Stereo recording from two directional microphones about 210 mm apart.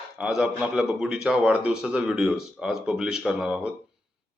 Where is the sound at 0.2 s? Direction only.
Centre (ahead or behind).